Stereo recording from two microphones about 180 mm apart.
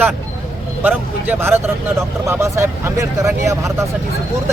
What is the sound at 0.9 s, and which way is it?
Speech, 10° right (ahead or behind).